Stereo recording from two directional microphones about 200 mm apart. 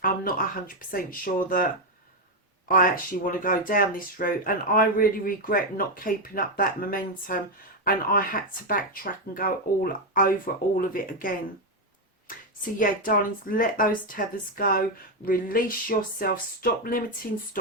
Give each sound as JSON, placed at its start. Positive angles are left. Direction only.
{"t": 0.0, "sound": "speech", "side_deg": 45}
{"t": 2.6, "sound": "speech", "side_deg": 45}
{"t": 12.8, "sound": "speech", "side_deg": 45}